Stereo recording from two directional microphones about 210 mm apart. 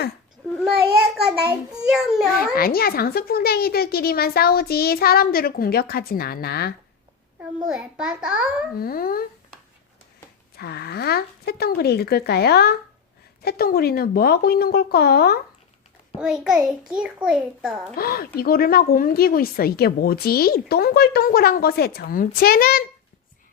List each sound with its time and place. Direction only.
1.7 s a child's voice: 5° right (ahead or behind)
2.3 s speech: 45° left (ahead or behind)
7.7 s a child's voice: 5° right (ahead or behind)
8.8 s speech: 45° left (ahead or behind)
10.6 s speech: 50° left (ahead or behind)
16.2 s a child's voice: 5° right (ahead or behind)
17.9 s speech: 45° left (ahead or behind)